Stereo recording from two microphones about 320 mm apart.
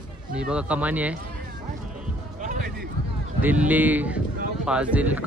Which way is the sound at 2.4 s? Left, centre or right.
Right.